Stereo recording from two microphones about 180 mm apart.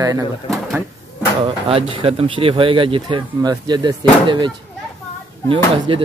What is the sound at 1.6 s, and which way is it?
Speech, 30° right (ahead or behind).